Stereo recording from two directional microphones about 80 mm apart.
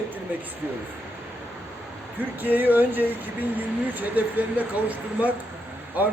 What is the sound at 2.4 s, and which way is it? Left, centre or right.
A man's voice, right.